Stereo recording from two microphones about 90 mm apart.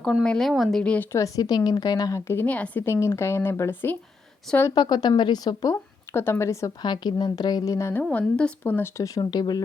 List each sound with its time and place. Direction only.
0.0 s speech: centre (ahead or behind)
0.8 s speech: 10° left (ahead or behind)
1.4 s a woman's voice: 50° left (ahead or behind)
2.2 s speech: 25° left (ahead or behind)
2.8 s speech: 30° left (ahead or behind)
4.7 s a woman's voice: 55° left (ahead or behind)
5.7 s speech: 25° left (ahead or behind)
6.8 s a woman's voice: 55° left (ahead or behind); by 7.9 s 35° left (ahead or behind)
8.1 s speech: 15° left (ahead or behind)
9.0 s a woman's voice: 40° left (ahead or behind)